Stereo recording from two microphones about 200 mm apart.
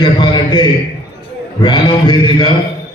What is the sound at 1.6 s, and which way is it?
Mantra, 20° left (ahead or behind).